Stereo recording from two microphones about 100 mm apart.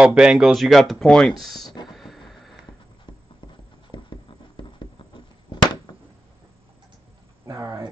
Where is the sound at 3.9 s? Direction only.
55° left (ahead or behind).